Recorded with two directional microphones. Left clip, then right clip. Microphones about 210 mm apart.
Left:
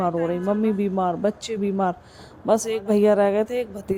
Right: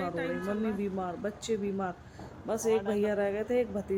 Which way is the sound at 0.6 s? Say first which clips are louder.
Left 11 dB; 35° left (ahead or behind).